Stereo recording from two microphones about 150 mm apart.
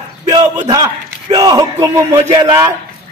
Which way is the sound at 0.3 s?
30° right (ahead or behind).